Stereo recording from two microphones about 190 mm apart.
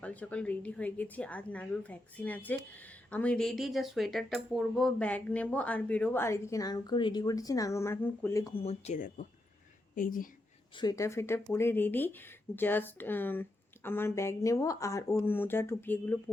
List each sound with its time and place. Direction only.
0.0 s speech: 5° left (ahead or behind)
8.5 s a woman's voice: 35° left (ahead or behind)
10.8 s speech: 20° left (ahead or behind)